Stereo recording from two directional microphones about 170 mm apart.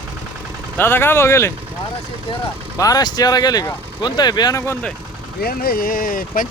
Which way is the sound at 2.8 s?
20° left (ahead or behind).